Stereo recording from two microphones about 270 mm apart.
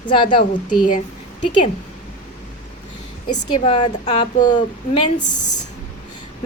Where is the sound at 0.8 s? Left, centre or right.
Left.